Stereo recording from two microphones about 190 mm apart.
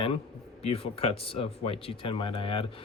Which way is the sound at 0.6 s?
30° left (ahead or behind).